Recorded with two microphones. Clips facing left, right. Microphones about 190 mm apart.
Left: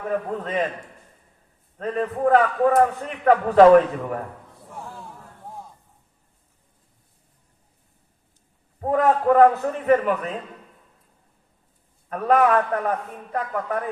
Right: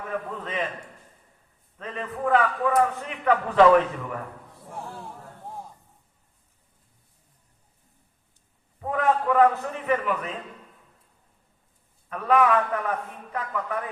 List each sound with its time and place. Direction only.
0.1 s a man's voice: 40° left (ahead or behind)
1.8 s a man's voice: 40° left (ahead or behind)
8.8 s a man's voice: 40° left (ahead or behind)
12.0 s a man's voice: 45° left (ahead or behind)